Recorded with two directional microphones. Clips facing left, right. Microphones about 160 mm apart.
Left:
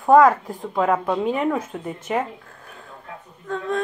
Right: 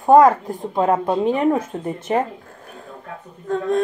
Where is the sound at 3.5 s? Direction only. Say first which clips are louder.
Right 5 dB; 35° right (ahead or behind).